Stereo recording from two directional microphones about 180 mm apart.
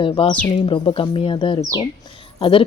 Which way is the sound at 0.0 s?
30° left (ahead or behind).